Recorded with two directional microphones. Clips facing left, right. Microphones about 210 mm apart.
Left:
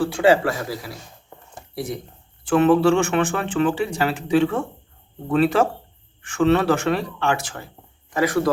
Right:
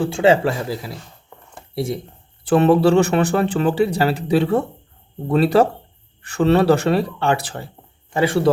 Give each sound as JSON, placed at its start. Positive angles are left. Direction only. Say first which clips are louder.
{"t": 0.0, "sound": "speech", "louder": "right 2 dB", "side_deg": -25}